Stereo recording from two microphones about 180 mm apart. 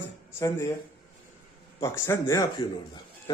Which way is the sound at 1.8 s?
15° left (ahead or behind).